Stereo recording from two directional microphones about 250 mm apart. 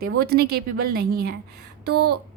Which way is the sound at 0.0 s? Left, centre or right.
Right.